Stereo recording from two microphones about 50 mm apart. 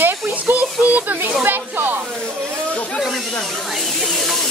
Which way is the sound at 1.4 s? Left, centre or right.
Right.